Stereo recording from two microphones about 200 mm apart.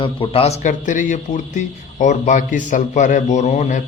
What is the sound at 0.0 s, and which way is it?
A man's voice, 25° left (ahead or behind).